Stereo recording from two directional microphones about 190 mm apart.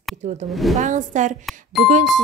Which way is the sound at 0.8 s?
40° right (ahead or behind).